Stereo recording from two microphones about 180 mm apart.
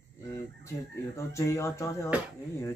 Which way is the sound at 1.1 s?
15° left (ahead or behind).